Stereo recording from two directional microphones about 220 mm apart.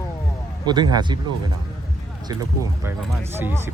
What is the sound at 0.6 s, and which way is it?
Speech, 20° right (ahead or behind).